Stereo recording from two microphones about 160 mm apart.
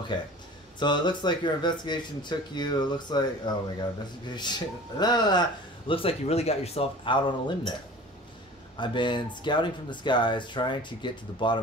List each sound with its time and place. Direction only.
0.7 s speech: 30° left (ahead or behind)
8.7 s speech: 30° left (ahead or behind)